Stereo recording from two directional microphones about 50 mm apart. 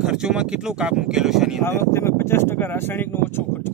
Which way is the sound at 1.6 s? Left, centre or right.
Left.